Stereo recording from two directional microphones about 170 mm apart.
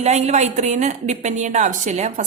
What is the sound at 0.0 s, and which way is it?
A woman's voice, 40° right (ahead or behind).